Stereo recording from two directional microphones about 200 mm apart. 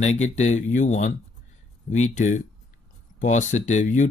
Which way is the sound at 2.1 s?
35° left (ahead or behind).